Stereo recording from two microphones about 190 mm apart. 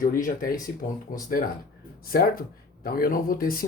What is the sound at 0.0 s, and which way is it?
Speech, 50° left (ahead or behind).